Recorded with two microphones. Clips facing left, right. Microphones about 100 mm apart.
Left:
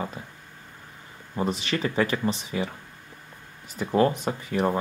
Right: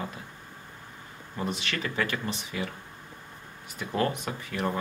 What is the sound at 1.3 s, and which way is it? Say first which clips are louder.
Speech: left 5 dB; 30° left (ahead or behind).